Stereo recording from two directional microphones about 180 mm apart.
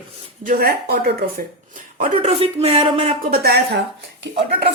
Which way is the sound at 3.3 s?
60° right (ahead or behind).